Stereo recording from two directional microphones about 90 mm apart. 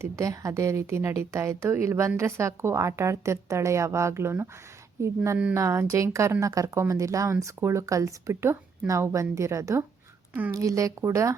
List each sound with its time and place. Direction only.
0.0 s speech: 35° right (ahead or behind)